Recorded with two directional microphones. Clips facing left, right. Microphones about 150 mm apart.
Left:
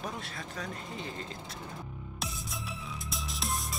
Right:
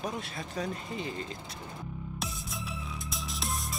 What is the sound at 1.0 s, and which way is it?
Speech, 10° right (ahead or behind).